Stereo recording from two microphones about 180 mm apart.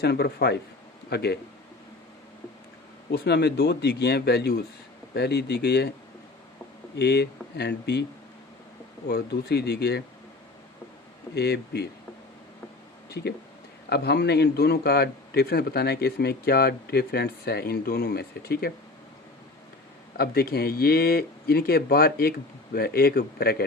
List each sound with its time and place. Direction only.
0.0 s speech: 60° left (ahead or behind)
3.1 s speech: 65° left (ahead or behind)
6.9 s speech: 65° left (ahead or behind)
9.0 s speech: 60° left (ahead or behind)
11.3 s speech: 65° left (ahead or behind)
13.1 s a sound: 65° left (ahead or behind)
13.9 s speech: 65° left (ahead or behind)
20.1 s speech: 60° left (ahead or behind)